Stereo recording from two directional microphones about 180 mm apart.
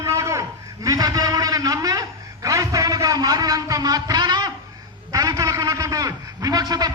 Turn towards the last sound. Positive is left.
turn(degrees=-20)  # may be behind; listen again after turning